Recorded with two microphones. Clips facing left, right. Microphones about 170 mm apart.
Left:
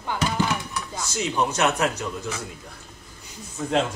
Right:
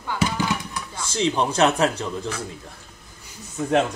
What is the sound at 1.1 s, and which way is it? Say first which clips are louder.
A man's voice: right 3 dB; 30° right (ahead or behind).